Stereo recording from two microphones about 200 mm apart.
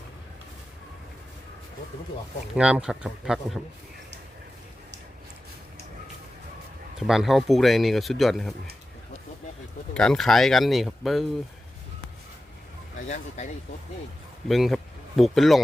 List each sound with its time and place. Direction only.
2.6 s speech: 5° right (ahead or behind)
7.1 s speech: centre (ahead or behind)
9.9 s speech: 5° left (ahead or behind)
13.1 s speech: 35° left (ahead or behind)
14.4 s speech: centre (ahead or behind)